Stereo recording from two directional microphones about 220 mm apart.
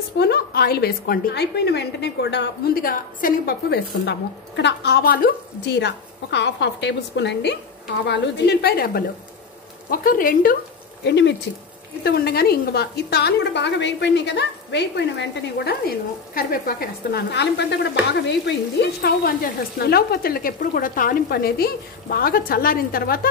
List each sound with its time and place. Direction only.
0.2 s a woman's voice: 45° left (ahead or behind)
11.1 s a woman's voice: 50° left (ahead or behind)